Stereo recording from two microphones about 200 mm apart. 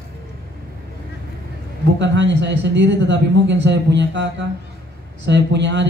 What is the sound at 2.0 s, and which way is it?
A man's voice, 60° right (ahead or behind).